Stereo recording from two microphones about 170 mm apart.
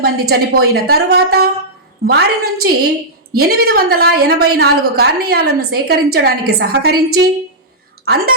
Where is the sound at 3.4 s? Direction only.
65° right (ahead or behind).